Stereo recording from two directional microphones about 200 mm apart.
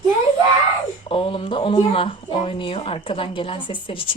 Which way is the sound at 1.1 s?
25° left (ahead or behind).